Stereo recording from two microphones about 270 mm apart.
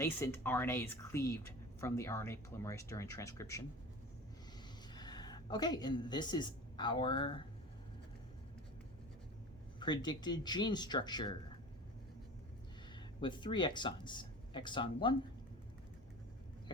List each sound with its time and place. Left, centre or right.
0.0 s a woman's voice: centre
4.9 s a woman's voice: centre
9.8 s a woman's voice: centre
13.2 s a woman's voice: centre